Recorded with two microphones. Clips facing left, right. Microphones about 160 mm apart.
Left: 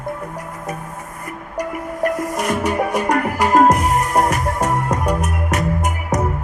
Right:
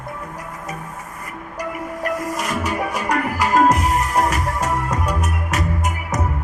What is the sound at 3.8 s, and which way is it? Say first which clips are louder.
Music: left 2 dB; 20° left (ahead or behind).